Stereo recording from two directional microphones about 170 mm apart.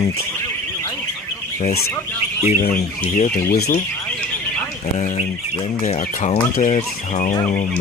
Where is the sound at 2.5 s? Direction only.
50° left (ahead or behind).